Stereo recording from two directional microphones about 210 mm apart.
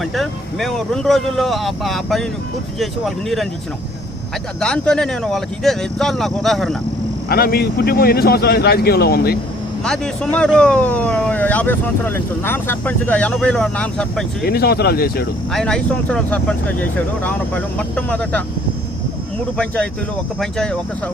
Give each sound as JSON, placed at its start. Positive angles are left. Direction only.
{"t": 0.0, "sound": "speech", "side_deg": 0}
{"t": 4.6, "sound": "speech", "side_deg": 5}
{"t": 7.3, "sound": "speech", "side_deg": 45}
{"t": 9.8, "sound": "speech", "side_deg": 5}
{"t": 14.4, "sound": "speech", "side_deg": 50}
{"t": 15.5, "sound": "speech", "side_deg": 5}
{"t": 19.5, "sound": "speech", "side_deg": 5}